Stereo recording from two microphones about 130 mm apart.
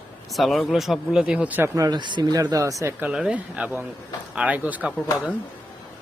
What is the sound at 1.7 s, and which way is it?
Speech, 30° right (ahead or behind).